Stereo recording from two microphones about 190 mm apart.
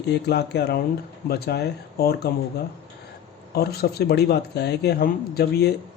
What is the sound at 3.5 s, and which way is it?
Speech, 55° left (ahead or behind).